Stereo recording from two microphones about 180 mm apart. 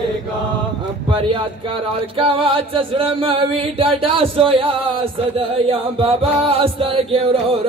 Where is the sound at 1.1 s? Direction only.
30° right (ahead or behind).